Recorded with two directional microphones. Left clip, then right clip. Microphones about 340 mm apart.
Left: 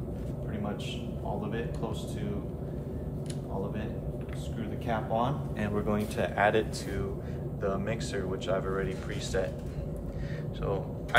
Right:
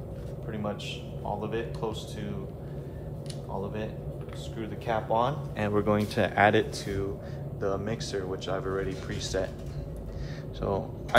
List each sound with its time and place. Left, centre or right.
4.6 s speech: right
7.6 s speech: centre
10.6 s speech: centre